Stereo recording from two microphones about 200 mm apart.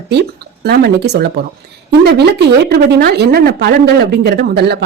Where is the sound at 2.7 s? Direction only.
55° right (ahead or behind).